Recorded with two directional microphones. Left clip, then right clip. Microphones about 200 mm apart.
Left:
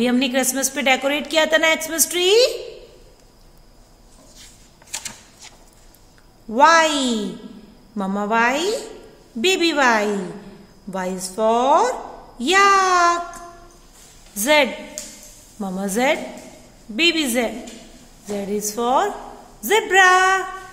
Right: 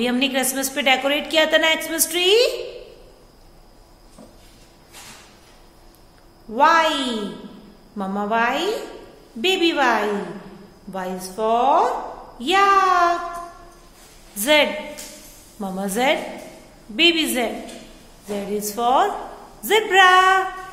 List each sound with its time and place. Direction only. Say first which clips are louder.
0.0 s a woman's voice: left 1 dB; 30° left (ahead or behind)
6.5 s a woman's voice: left 2 dB; 35° left (ahead or behind)
14.4 s a woman's voice: even; 30° left (ahead or behind)
18.5 s a woman's voice: right 1 dB; 30° left (ahead or behind)